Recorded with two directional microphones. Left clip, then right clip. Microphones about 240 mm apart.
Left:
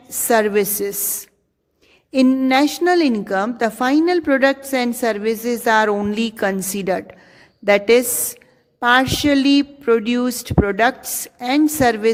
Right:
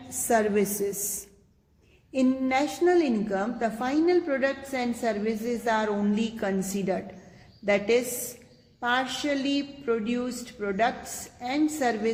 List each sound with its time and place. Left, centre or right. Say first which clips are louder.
0.3 s a woman's voice: left 8 dB; left
2.1 s a woman's voice: left 10 dB; left